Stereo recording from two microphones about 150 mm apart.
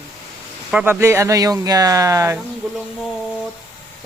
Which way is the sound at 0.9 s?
20° right (ahead or behind).